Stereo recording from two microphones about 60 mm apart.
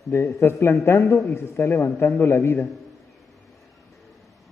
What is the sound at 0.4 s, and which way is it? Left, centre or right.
A man's voice, left.